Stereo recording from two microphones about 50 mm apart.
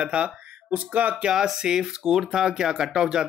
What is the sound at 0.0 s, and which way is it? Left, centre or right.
Speech, right.